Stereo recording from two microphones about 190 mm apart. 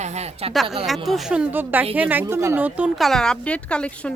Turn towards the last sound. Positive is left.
turn(degrees=5)  # may be behind; listen again after turning